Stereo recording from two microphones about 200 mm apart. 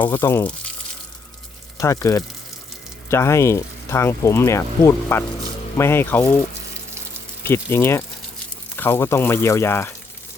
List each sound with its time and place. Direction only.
0.0 s speech: 10° left (ahead or behind)
1.8 s speech: 15° left (ahead or behind)
7.4 s speech: 10° left (ahead or behind)